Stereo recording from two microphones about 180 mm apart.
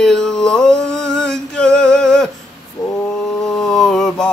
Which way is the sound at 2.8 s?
25° left (ahead or behind).